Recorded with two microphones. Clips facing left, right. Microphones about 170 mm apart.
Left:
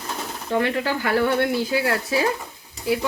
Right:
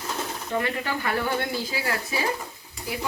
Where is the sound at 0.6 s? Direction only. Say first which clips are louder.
Left 5 dB; 80° left.